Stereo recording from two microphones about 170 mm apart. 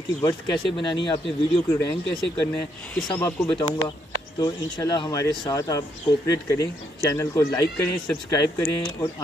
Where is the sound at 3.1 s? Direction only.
15° left (ahead or behind).